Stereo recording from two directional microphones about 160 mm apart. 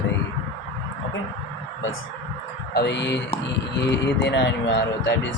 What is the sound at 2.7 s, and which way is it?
Speech, 90° left.